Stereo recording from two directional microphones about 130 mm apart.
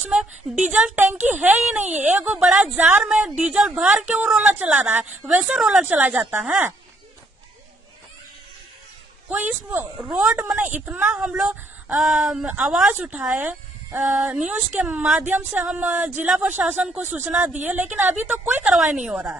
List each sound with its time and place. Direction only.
0.6 s a woman's voice: 10° right (ahead or behind)
9.3 s speech: 15° right (ahead or behind)
10.1 s a woman's voice: 5° right (ahead or behind)